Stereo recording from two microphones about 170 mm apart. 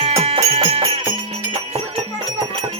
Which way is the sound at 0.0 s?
35° right (ahead or behind).